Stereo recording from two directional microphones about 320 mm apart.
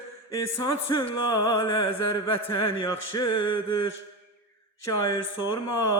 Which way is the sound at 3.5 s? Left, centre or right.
Left.